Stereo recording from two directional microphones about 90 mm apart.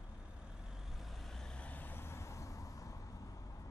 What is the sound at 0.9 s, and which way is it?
Vehicle, centre (ahead or behind).